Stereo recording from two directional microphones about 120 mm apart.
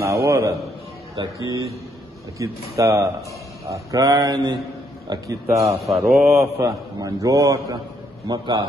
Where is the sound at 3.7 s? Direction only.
30° right (ahead or behind).